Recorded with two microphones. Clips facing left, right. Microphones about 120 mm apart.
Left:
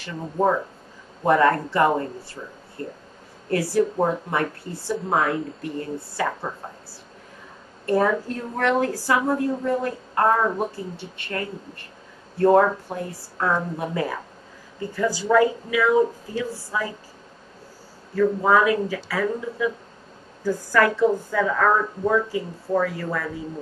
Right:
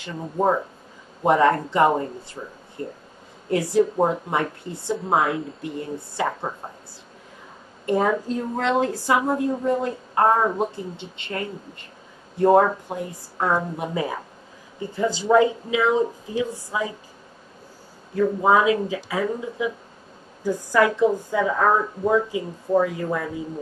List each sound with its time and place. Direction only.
0.4 s a woman's voice: 15° right (ahead or behind)
7.8 s a woman's voice: 20° right (ahead or behind)
18.1 s a woman's voice: 20° right (ahead or behind)